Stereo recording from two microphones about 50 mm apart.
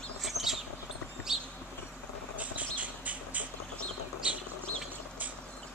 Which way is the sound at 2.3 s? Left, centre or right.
Right.